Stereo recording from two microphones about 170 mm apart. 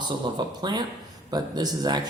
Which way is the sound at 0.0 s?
25° right (ahead or behind).